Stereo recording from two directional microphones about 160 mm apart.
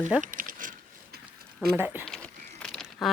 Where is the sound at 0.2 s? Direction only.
60° right (ahead or behind).